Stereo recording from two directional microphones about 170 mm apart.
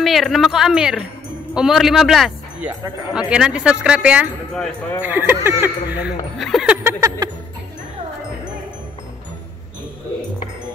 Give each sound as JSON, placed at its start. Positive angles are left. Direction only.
{"t": 0.0, "sound": "speech", "side_deg": 0}
{"t": 4.6, "sound": "speech", "side_deg": 5}
{"t": 5.0, "sound": "speech", "side_deg": -10}
{"t": 6.8, "sound": "a sound", "side_deg": -15}